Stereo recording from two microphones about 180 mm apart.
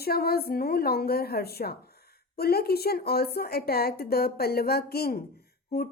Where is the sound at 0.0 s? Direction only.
60° left (ahead or behind).